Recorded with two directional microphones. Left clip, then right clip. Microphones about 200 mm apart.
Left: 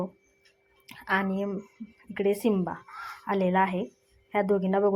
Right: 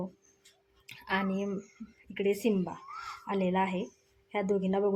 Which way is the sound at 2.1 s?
10° left (ahead or behind).